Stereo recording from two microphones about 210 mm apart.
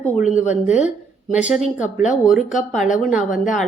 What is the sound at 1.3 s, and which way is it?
Speech, 5° right (ahead or behind).